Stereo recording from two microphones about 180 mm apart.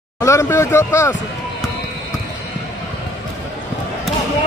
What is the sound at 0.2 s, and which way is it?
Speech, 15° left (ahead or behind).